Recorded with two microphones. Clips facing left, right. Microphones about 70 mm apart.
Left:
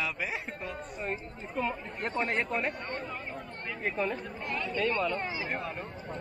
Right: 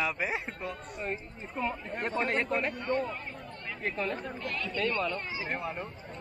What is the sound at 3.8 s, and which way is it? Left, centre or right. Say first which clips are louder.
A man's voice: left 1 dB; centre.